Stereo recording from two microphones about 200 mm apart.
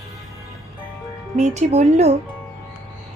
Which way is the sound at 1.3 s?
35° right (ahead or behind).